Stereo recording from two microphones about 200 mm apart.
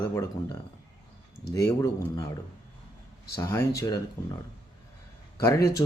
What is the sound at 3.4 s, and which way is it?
Speech, 15° left (ahead or behind).